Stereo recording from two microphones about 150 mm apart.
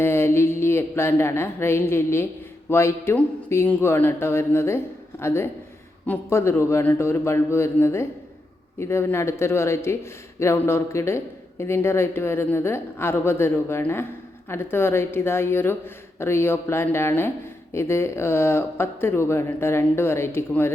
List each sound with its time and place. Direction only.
0.0 s speech: 15° left (ahead or behind)